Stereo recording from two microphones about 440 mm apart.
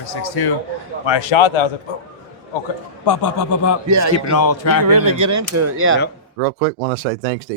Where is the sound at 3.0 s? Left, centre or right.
Left.